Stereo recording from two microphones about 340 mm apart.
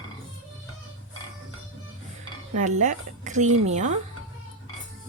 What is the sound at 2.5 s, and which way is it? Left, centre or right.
A woman's voice, right.